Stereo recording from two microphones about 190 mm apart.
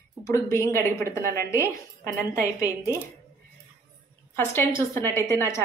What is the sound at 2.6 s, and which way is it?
Speech, 15° right (ahead or behind).